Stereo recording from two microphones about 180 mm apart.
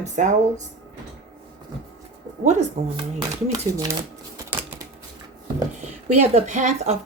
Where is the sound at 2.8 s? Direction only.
40° right (ahead or behind).